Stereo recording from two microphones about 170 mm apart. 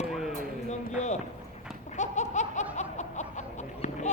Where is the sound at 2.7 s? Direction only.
45° left (ahead or behind).